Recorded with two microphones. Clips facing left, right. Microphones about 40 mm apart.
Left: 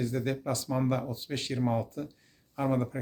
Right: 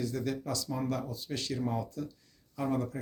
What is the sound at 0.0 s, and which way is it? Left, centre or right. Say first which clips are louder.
Speech: left 3 dB; left.